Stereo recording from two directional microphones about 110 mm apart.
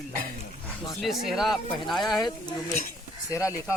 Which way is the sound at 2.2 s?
40° left (ahead or behind).